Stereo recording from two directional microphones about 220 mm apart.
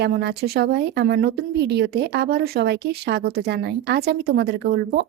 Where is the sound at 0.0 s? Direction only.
50° right (ahead or behind).